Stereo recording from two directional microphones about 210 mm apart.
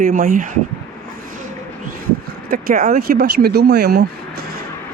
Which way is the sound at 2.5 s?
40° right (ahead or behind).